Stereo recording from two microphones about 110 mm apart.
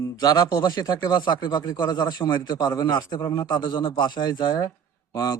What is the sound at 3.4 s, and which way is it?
Speech, 40° left (ahead or behind).